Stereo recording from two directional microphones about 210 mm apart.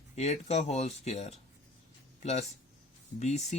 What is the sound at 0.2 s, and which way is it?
Speech, 30° left (ahead or behind).